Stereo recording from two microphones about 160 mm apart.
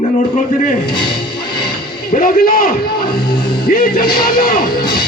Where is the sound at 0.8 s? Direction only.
30° left (ahead or behind).